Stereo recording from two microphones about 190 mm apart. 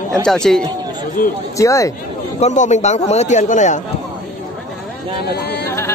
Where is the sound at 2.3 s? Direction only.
40° left (ahead or behind).